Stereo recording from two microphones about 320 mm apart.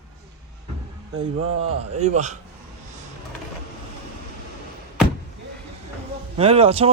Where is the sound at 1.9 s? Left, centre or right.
Right.